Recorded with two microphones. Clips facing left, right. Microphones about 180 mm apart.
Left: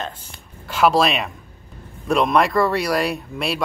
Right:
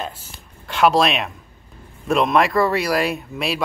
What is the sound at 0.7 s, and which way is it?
Speech, centre (ahead or behind).